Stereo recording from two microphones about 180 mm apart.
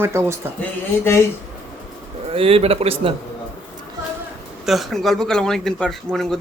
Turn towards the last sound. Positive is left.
turn(degrees=5)  # may be behind; listen again after turning